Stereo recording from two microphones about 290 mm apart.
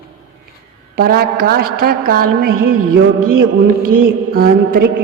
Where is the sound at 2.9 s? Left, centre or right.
Right.